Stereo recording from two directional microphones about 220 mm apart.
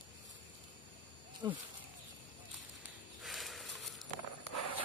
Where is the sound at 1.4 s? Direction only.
20° right (ahead or behind).